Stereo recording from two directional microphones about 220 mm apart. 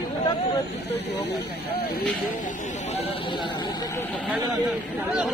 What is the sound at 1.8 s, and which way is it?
Speech, 45° left (ahead or behind).